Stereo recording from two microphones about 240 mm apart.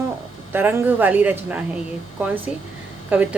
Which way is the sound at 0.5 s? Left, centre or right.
Centre.